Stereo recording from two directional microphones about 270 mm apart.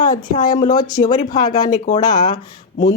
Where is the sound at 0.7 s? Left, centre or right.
Centre.